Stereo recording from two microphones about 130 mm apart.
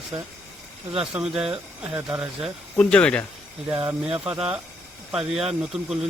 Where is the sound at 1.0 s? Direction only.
5° right (ahead or behind).